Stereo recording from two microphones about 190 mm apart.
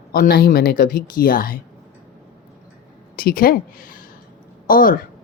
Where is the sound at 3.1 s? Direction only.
50° left (ahead or behind).